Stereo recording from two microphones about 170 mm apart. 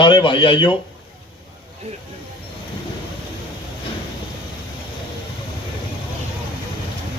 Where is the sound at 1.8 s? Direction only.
40° right (ahead or behind).